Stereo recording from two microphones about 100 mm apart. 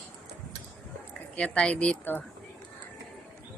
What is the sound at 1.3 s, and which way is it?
Speech, 10° left (ahead or behind).